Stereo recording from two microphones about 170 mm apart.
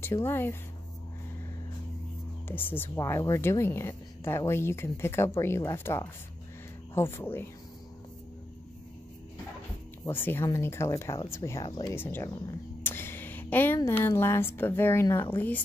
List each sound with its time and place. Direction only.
0.0 s speech: 15° left (ahead or behind)
2.4 s speech: 10° left (ahead or behind)
10.0 s speech: 15° left (ahead or behind)
12.8 s a sound: 15° left (ahead or behind)
13.7 s speech: 15° left (ahead or behind)